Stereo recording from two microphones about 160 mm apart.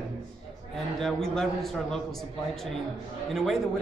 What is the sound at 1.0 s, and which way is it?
A man's voice, centre (ahead or behind).